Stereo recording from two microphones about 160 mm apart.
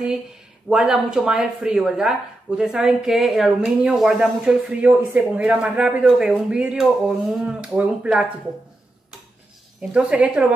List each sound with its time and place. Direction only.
0.7 s speech: 5° right (ahead or behind)
9.8 s speech: 5° right (ahead or behind)